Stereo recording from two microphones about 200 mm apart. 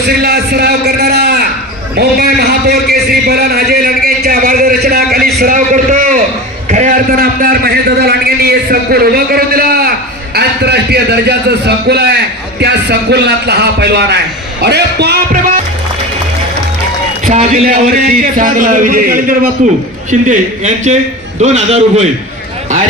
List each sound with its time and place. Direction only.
0.0 s a sound: 50° right (ahead or behind)
5.4 s a man's voice: 40° right (ahead or behind)
17.2 s a man's voice: 40° right (ahead or behind)